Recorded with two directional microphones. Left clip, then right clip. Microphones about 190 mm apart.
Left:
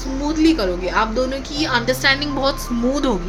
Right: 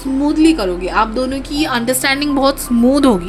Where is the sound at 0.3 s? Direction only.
35° right (ahead or behind).